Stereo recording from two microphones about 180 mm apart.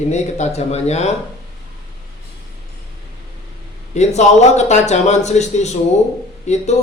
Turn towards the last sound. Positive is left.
turn(degrees=40)  # may be behind; listen again after turning